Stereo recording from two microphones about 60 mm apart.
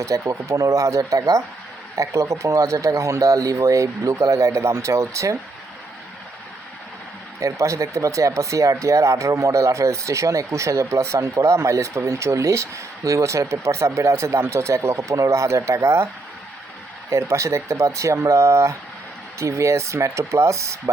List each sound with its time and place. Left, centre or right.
0.0 s speech: right
2.0 s speech: right
7.3 s speech: right
17.1 s speech: right